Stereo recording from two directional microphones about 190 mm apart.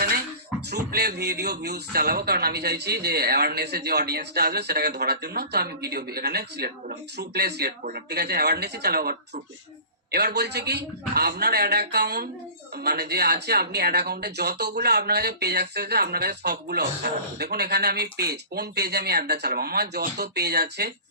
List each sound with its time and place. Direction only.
0.7 s a man's voice: 60° right (ahead or behind)